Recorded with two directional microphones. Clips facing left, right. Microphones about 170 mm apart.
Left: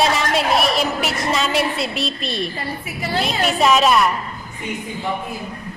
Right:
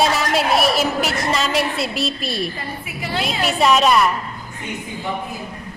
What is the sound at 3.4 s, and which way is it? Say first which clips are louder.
Speech: even; centre (ahead or behind).